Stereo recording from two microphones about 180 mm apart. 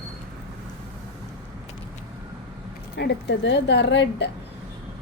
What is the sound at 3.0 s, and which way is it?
A woman's voice, 65° left (ahead or behind).